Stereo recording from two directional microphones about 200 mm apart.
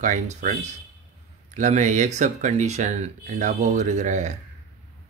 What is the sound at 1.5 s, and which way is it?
Speech, 35° right (ahead or behind).